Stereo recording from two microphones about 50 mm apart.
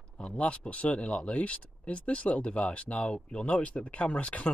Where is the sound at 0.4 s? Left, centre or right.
Left.